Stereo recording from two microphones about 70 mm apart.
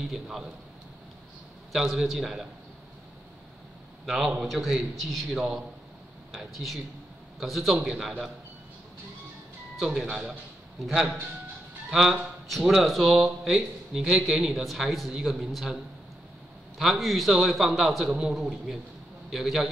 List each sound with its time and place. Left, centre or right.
0.1 s speech: centre
1.7 s speech: centre
4.0 s a man's voice: centre
9.8 s a man's voice: centre